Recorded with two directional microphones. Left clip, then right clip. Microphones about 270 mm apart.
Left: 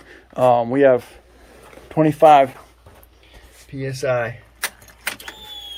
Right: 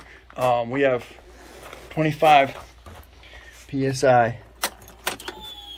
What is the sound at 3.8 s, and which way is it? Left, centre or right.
Speech, centre.